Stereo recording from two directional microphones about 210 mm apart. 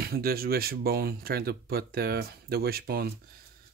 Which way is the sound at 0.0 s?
45° right (ahead or behind).